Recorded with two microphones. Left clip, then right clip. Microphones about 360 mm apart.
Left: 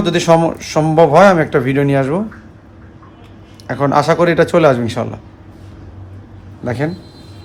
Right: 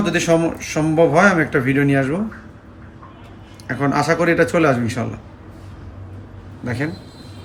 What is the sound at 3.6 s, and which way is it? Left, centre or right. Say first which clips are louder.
A man's voice: left 6 dB; left.